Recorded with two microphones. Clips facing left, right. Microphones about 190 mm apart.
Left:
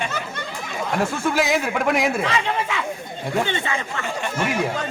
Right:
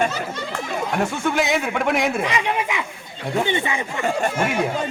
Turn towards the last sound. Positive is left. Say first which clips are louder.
# right 1 dB
turn(degrees=-15)  # may be behind; listen again after turning